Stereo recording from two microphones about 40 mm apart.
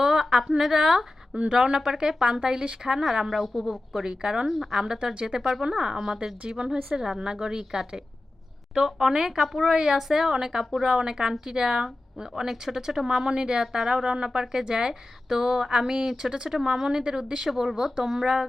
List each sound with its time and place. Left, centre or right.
0.0 s a woman's voice: centre
4.0 s a woman's voice: centre
17.5 s a woman's voice: centre